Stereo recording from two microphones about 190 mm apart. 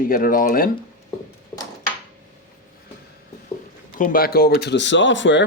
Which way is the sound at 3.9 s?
45° left (ahead or behind).